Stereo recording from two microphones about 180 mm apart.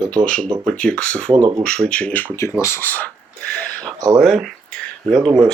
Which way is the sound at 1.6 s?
5° left (ahead or behind).